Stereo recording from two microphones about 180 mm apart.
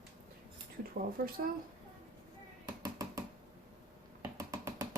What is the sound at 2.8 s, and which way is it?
Hands, 20° right (ahead or behind).